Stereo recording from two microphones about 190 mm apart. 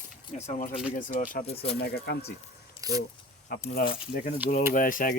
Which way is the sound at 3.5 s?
50° left (ahead or behind).